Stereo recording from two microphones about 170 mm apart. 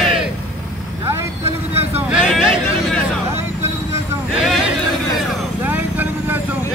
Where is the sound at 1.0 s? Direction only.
15° right (ahead or behind).